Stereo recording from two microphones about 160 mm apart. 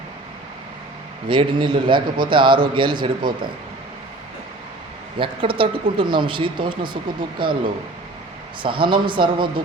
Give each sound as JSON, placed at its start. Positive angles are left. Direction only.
{"t": 1.3, "sound": "a man's voice", "side_deg": -30}
{"t": 5.1, "sound": "speech", "side_deg": -30}
{"t": 8.6, "sound": "speech", "side_deg": -30}